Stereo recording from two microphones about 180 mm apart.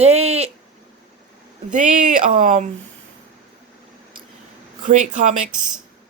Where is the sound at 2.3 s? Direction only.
50° right (ahead or behind).